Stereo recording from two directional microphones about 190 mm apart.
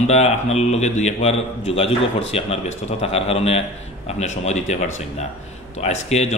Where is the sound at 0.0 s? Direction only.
35° left (ahead or behind).